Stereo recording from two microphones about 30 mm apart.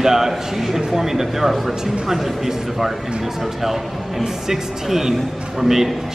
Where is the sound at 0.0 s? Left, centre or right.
Centre.